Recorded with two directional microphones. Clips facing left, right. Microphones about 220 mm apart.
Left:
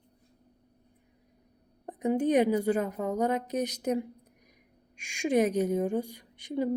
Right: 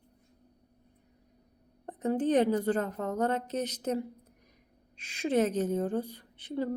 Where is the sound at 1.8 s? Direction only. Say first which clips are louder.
Left 2 dB; 10° left (ahead or behind).